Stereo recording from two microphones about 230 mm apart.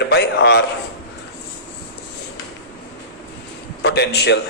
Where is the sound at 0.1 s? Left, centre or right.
Left.